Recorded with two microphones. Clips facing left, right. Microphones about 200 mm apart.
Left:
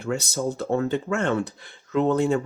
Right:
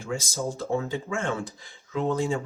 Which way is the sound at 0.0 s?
65° left (ahead or behind).